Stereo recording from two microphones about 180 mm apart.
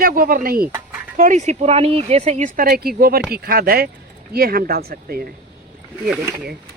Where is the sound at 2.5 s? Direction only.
55° right (ahead or behind).